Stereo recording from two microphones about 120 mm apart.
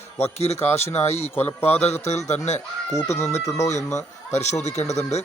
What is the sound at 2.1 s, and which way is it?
Speech, 75° left (ahead or behind).